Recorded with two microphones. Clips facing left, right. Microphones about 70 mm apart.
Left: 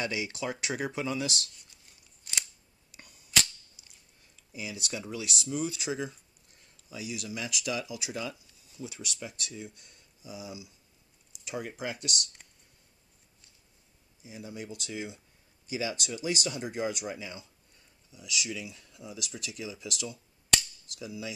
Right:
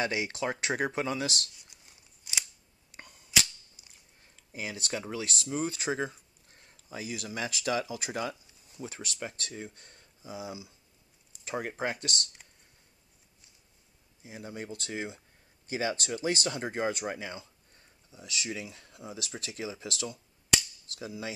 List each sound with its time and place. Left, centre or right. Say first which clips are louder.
0.0 s speech: right 2 dB; right
2.3 s scissors: even; centre
2.9 s a sound: right 4 dB; right
4.4 s speech: right 1 dB; right
14.2 s speech: right 1 dB; right